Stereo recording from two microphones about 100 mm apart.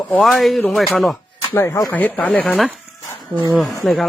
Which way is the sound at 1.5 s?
30° left (ahead or behind).